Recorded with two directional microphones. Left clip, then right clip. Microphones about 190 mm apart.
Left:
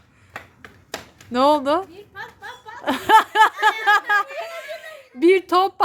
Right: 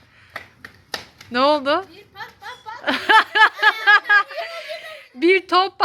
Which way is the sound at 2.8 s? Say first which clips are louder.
Even; 15° left (ahead or behind).